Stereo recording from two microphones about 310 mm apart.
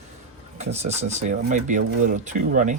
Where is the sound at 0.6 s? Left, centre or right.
Right.